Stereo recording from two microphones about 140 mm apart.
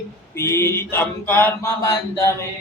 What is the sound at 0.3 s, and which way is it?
Mantra, 20° left (ahead or behind).